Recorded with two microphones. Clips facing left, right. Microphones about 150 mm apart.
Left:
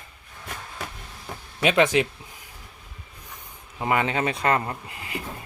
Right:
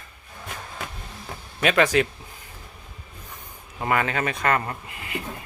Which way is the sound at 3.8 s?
20° left (ahead or behind).